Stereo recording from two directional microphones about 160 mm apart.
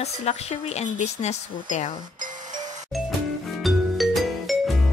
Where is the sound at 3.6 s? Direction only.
Centre (ahead or behind).